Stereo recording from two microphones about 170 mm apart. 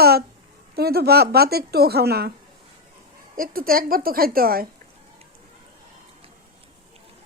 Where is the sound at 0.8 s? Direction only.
65° right (ahead or behind).